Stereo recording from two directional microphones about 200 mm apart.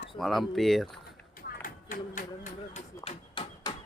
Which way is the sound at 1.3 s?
45° left (ahead or behind).